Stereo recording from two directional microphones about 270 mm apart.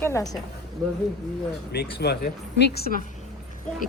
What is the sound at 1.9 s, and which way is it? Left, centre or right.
Speech, left.